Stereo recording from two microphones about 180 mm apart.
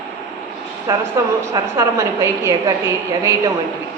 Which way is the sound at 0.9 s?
20° right (ahead or behind).